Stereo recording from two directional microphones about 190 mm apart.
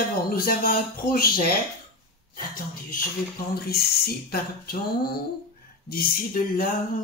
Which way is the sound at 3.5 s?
55° left (ahead or behind).